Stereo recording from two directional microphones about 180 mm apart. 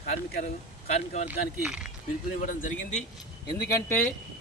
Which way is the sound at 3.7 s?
15° left (ahead or behind).